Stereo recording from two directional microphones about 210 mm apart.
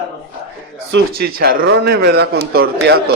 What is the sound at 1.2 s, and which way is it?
A man's voice, 45° right (ahead or behind).